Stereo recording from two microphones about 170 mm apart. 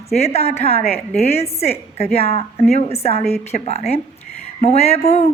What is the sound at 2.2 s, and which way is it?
A woman's voice, 35° left (ahead or behind).